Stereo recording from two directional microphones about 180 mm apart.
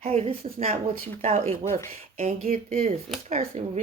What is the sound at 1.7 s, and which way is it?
Speech, 15° left (ahead or behind).